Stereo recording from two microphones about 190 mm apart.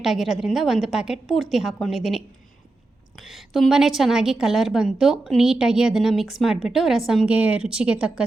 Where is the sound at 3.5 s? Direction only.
Centre (ahead or behind).